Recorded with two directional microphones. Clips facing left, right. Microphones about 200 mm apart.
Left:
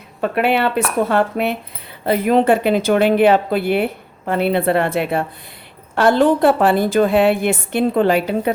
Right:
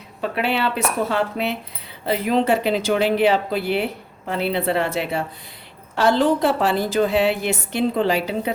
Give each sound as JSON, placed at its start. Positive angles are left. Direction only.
{"t": 0.2, "sound": "a woman's voice", "side_deg": 55}